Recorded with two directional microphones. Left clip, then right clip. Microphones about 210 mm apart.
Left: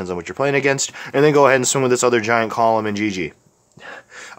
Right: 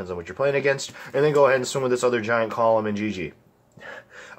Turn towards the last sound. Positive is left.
turn(degrees=40)  # may be behind; listen again after turning